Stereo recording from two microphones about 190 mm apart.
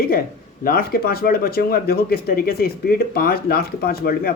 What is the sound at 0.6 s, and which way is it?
Speech, 50° left (ahead or behind).